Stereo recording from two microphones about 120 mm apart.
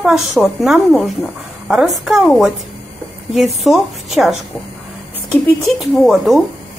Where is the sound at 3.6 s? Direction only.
Centre (ahead or behind).